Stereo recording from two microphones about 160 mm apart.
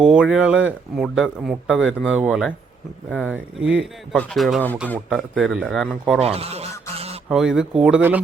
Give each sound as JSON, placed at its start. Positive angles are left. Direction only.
{"t": 0.0, "sound": "speech", "side_deg": -5}
{"t": 6.1, "sound": "speech", "side_deg": -40}
{"t": 6.9, "sound": "honk", "side_deg": -40}
{"t": 7.3, "sound": "speech", "side_deg": -5}